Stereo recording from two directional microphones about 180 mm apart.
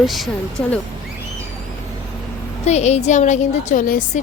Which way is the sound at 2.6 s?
40° left (ahead or behind).